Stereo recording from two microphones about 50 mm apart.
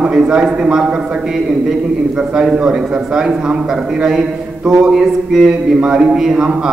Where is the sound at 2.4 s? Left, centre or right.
Centre.